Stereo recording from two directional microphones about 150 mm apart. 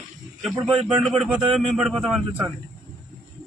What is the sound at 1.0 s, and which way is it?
Speech, centre (ahead or behind).